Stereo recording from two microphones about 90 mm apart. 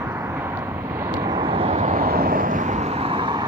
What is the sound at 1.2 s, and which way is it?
Vehicle, 55° right (ahead or behind).